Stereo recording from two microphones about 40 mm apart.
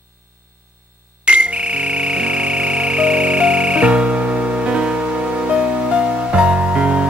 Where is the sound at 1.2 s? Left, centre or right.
Right.